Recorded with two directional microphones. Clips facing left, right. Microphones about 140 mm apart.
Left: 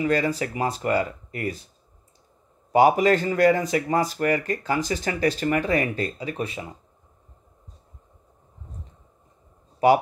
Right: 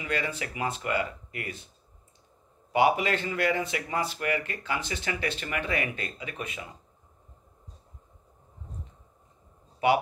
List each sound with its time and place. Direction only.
0.0 s speech: 40° left (ahead or behind)
2.7 s speech: 40° left (ahead or behind)
9.8 s speech: 40° left (ahead or behind)